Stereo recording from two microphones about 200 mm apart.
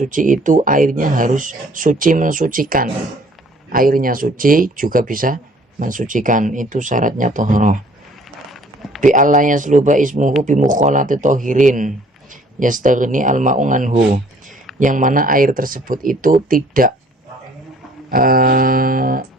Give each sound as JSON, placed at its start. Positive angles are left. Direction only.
{"t": 0.0, "sound": "speech", "side_deg": -40}
{"t": 9.0, "sound": "speech", "side_deg": -40}
{"t": 18.1, "sound": "speech", "side_deg": -45}